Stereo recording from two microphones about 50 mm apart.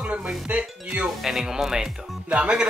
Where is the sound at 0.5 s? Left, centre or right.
Right.